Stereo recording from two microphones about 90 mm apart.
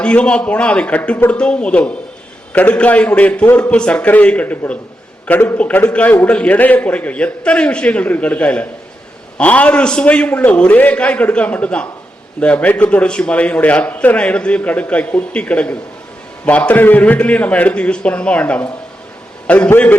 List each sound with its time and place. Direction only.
0.0 s a man's voice: 10° left (ahead or behind)